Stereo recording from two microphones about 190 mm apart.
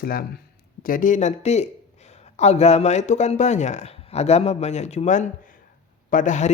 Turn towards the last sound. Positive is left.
turn(degrees=40)  # may be behind; listen again after turning